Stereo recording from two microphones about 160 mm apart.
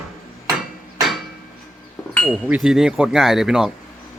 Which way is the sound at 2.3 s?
5° right (ahead or behind).